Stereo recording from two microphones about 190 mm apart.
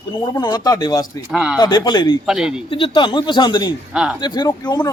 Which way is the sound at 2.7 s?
25° left (ahead or behind).